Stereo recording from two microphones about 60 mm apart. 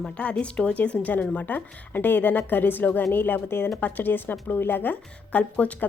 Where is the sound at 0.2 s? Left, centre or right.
Left.